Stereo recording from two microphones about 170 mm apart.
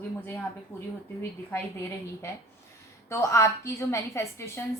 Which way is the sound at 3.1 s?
15° left (ahead or behind).